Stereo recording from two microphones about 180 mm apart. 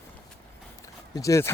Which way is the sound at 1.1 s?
15° left (ahead or behind).